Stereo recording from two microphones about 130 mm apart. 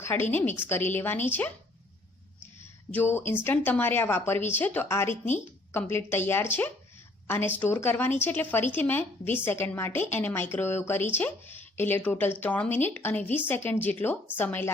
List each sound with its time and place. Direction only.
0.0 s speech: 15° left (ahead or behind)
2.9 s speech: 15° left (ahead or behind)